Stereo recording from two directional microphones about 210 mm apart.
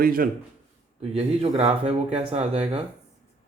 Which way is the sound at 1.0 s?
30° right (ahead or behind).